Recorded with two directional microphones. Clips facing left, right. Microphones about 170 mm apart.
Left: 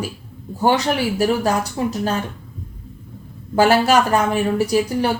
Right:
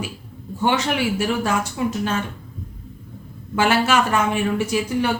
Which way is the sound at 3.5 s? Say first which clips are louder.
Left 4 dB; 40° left (ahead or behind).